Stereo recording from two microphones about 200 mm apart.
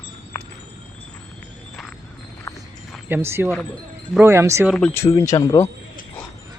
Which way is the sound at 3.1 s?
10° right (ahead or behind).